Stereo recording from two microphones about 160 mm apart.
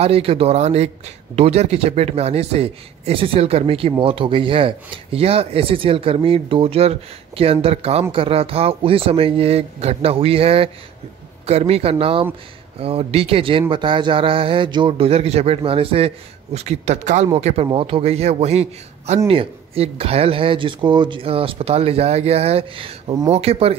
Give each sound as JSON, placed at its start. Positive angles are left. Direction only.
{"t": 0.0, "sound": "a man's voice", "side_deg": -35}